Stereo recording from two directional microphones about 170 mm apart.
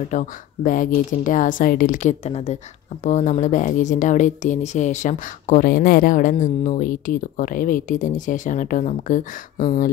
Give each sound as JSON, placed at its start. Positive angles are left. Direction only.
{"t": 0.1, "sound": "speech", "side_deg": 50}